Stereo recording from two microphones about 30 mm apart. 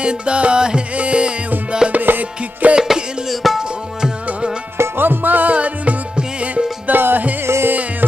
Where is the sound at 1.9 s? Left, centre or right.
Right.